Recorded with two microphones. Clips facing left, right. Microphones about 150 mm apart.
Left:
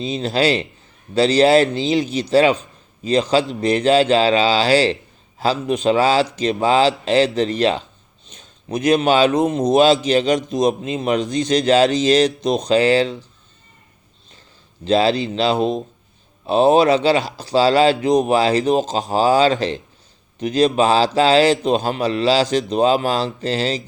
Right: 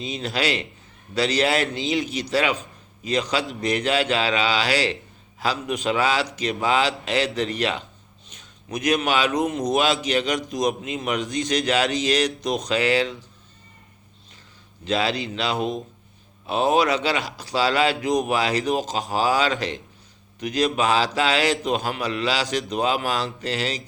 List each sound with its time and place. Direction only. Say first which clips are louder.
0.0 s a man's voice: left 7 dB; 30° left (ahead or behind)
14.8 s a man's voice: left 8 dB; 30° left (ahead or behind)